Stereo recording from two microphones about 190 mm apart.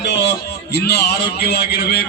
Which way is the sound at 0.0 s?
65° left (ahead or behind).